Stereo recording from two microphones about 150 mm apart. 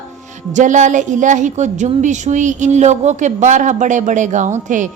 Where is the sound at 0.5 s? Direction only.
55° right (ahead or behind).